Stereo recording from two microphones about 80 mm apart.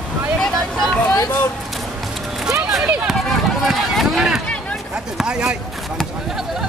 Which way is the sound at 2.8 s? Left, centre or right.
Centre.